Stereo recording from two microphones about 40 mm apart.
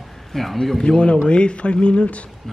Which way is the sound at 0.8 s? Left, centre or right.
Left.